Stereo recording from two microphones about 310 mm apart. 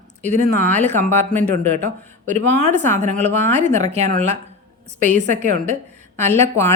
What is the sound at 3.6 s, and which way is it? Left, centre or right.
A woman's voice, right.